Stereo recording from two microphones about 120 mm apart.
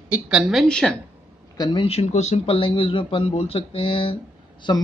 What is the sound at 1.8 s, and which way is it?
Speech, 65° left (ahead or behind).